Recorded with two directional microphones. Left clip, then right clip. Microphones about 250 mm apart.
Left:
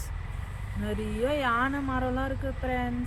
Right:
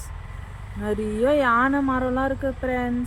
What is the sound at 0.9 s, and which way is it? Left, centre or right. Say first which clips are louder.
Speech: right 8 dB; right.